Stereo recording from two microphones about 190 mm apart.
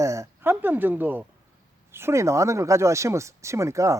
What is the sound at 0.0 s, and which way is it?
Speech, 15° right (ahead or behind).